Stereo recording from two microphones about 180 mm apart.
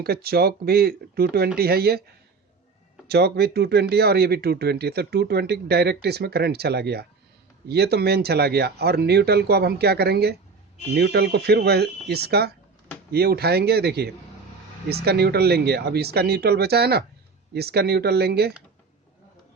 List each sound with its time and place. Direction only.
0.0 s speech: 60° right (ahead or behind)
3.1 s speech: 65° right (ahead or behind)